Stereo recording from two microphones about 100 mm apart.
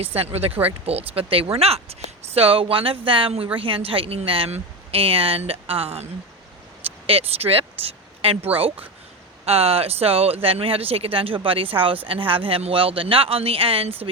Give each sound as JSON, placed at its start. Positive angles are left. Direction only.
{"t": 0.0, "sound": "speech", "side_deg": -85}
{"t": 1.5, "sound": "speech", "side_deg": -90}
{"t": 7.1, "sound": "speech", "side_deg": -75}
{"t": 9.5, "sound": "speech", "side_deg": -85}